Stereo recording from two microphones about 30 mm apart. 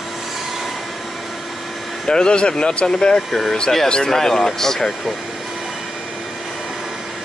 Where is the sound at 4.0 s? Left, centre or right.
Centre.